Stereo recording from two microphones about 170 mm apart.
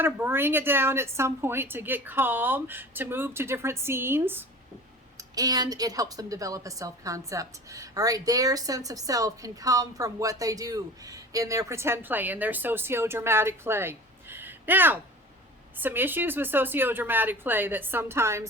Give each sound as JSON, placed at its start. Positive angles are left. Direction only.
{"t": 0.0, "sound": "a woman's voice", "side_deg": -15}